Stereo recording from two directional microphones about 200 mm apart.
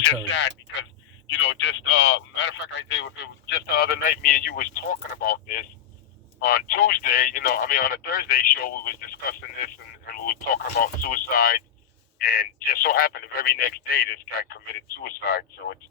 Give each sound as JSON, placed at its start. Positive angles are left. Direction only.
{"t": 0.3, "sound": "speech", "side_deg": 65}
{"t": 1.5, "sound": "speech", "side_deg": 75}